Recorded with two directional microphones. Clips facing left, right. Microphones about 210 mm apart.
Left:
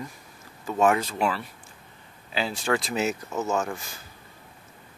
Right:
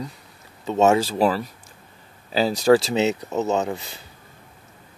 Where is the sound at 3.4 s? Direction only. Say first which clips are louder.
Right 4 dB; 20° right (ahead or behind).